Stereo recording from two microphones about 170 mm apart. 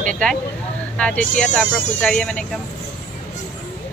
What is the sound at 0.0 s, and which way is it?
A woman's voice, 5° left (ahead or behind).